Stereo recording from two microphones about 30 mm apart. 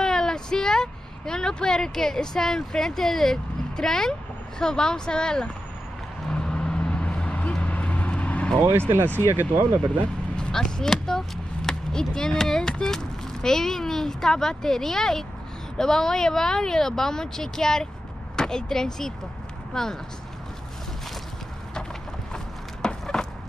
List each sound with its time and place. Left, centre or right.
0.0 s speech: centre
6.3 s vehicle: left
6.8 s vehicle: left
8.6 s speech: right
10.3 s vehicle: left
10.8 s speech: centre
22.3 s a sound: left